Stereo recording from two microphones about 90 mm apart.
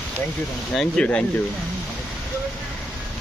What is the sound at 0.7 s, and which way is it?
Speech, 5° left (ahead or behind).